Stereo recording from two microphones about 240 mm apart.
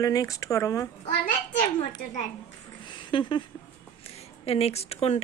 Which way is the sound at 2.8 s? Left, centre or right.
Centre.